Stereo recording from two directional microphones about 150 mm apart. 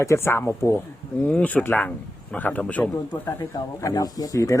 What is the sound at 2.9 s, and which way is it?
Speech, 25° left (ahead or behind).